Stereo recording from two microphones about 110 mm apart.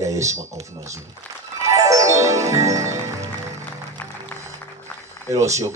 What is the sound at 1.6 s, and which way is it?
Music, 30° right (ahead or behind).